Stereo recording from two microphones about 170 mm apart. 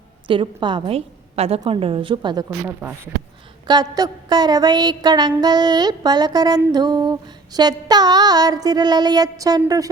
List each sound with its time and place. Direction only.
0.3 s female singing: 30° right (ahead or behind)